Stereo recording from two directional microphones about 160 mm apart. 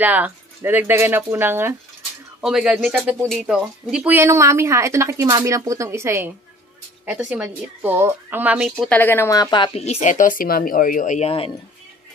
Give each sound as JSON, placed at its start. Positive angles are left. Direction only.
{"t": 0.0, "sound": "speech", "side_deg": -10}
{"t": 2.4, "sound": "speech", "side_deg": -5}
{"t": 8.8, "sound": "speech", "side_deg": 10}
{"t": 9.8, "sound": "speech", "side_deg": 45}